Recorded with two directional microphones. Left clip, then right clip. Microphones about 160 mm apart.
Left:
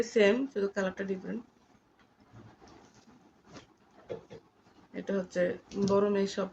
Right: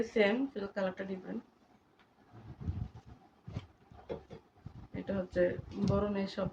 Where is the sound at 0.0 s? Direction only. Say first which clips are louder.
Left 4 dB; 40° left (ahead or behind).